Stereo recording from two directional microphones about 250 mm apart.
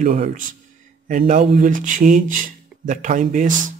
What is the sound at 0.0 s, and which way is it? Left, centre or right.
Speech, right.